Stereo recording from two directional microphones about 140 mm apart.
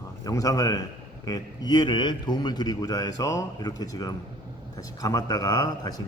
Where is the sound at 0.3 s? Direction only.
25° left (ahead or behind).